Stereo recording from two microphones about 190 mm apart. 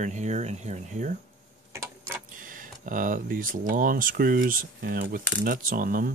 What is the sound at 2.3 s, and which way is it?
Speech, 45° right (ahead or behind).